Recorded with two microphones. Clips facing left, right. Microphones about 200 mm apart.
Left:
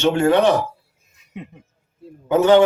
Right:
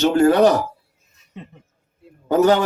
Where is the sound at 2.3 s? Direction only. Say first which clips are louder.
Left 2 dB; 40° right (ahead or behind).